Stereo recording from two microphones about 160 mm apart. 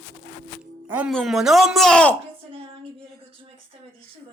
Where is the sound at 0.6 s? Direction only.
10° right (ahead or behind).